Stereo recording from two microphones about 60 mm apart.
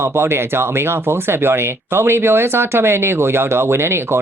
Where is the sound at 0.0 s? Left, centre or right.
Right.